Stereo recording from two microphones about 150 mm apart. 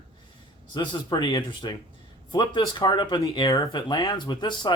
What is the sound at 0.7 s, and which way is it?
Speech, 30° left (ahead or behind).